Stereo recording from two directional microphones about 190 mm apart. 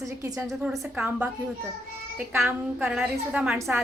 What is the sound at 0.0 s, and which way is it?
Speech, 15° right (ahead or behind).